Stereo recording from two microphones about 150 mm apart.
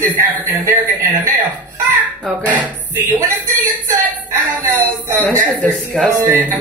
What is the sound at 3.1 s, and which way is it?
Speech, 15° right (ahead or behind).